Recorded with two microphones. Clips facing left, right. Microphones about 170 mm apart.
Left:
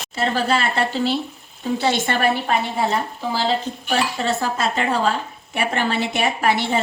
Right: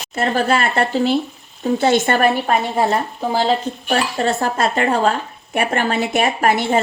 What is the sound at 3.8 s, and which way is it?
A woman's voice, 50° right (ahead or behind).